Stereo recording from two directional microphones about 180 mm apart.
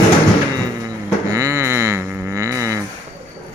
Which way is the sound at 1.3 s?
15° right (ahead or behind).